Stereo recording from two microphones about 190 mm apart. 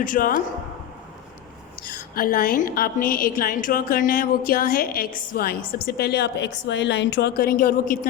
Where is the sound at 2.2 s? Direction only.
50° left (ahead or behind).